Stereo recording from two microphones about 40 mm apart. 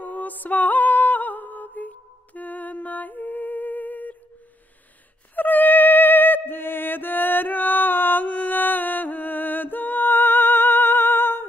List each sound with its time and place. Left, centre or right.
0.0 s music: left
5.3 s music: left
8.3 s music: left